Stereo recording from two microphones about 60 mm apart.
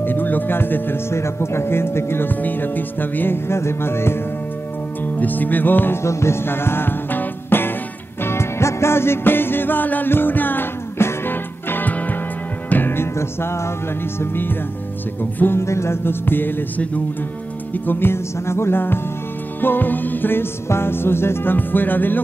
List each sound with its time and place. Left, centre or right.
0.0 s speech: left
1.1 s speech: left
5.0 s music: left
6.0 s music: left
14.2 s music: left
15.6 s music: left